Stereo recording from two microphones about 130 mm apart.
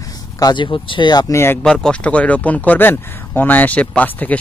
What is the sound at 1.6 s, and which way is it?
Speech, 5° left (ahead or behind).